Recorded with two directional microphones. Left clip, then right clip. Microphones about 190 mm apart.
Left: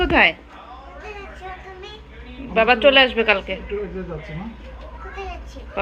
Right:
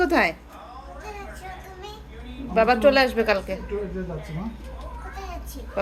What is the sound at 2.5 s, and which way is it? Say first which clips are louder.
Speech: left 3 dB; 10° right (ahead or behind).